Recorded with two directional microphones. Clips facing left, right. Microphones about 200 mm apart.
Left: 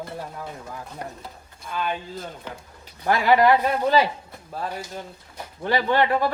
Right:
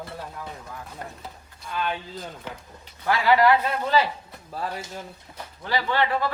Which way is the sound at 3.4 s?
20° left (ahead or behind).